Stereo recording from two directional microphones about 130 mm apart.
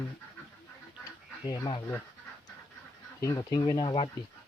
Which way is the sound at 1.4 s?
30° left (ahead or behind).